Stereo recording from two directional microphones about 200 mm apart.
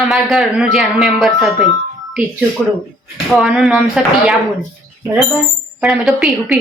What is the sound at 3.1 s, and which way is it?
Speech, centre (ahead or behind).